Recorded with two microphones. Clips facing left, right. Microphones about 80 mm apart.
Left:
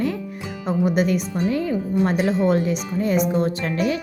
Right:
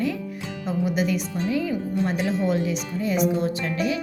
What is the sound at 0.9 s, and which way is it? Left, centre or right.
Speech, left.